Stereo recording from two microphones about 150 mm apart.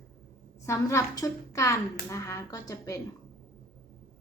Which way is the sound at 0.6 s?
20° left (ahead or behind).